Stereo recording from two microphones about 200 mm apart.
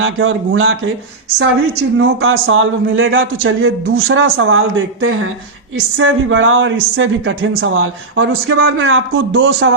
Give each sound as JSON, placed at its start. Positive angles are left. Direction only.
{"t": 0.0, "sound": "a man's voice", "side_deg": -90}
{"t": 2.0, "sound": "a man's voice", "side_deg": -85}